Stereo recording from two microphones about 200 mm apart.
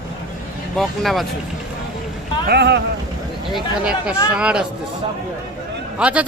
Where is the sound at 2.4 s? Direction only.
55° right (ahead or behind).